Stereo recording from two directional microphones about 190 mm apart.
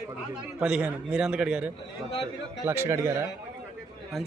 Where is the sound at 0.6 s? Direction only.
5° right (ahead or behind).